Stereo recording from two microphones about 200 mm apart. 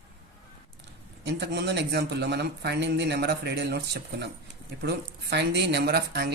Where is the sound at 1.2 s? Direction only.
60° right (ahead or behind).